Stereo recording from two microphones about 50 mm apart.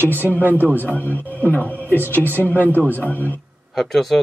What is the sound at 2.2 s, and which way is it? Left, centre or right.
Speech, right.